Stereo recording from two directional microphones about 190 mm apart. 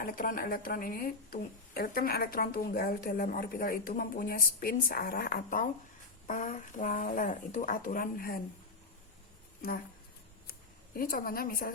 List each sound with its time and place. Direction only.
0.0 s a woman's voice: 45° left (ahead or behind)
9.6 s speech: 45° left (ahead or behind)
10.9 s a woman's voice: 50° left (ahead or behind)